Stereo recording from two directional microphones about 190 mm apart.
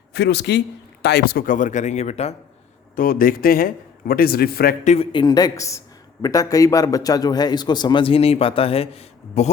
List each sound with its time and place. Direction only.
0.1 s speech: 60° left (ahead or behind); by 2.3 s 35° left (ahead or behind)
2.9 s a man's voice: 50° left (ahead or behind)
4.8 s speech: 35° left (ahead or behind)
5.1 s a man's voice: 20° left (ahead or behind)